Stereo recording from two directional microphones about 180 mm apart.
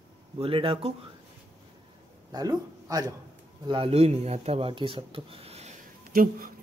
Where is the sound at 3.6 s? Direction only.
30° right (ahead or behind).